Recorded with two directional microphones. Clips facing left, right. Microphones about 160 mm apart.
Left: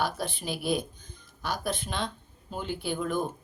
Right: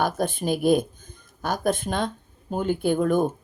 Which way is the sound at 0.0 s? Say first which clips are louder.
Right 7 dB; 50° right (ahead or behind).